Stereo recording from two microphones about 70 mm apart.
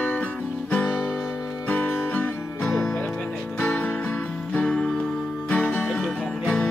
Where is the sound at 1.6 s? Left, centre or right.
Centre.